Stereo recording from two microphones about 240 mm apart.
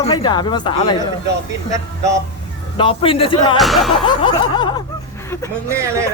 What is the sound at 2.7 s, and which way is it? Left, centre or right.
Speech, left.